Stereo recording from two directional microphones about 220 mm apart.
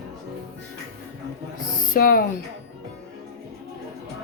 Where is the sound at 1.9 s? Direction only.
40° left (ahead or behind).